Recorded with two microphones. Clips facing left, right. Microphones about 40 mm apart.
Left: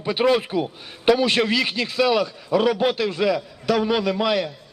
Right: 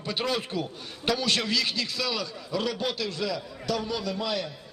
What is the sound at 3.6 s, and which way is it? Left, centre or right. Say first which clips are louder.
Speech: left 10 dB; left.